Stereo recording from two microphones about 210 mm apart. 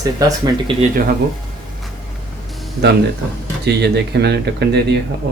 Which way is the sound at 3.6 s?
50° right (ahead or behind).